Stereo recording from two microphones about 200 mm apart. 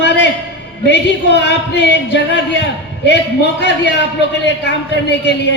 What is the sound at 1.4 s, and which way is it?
A man's voice, 60° left (ahead or behind).